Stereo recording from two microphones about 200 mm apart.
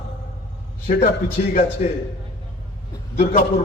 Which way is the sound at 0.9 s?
35° left (ahead or behind).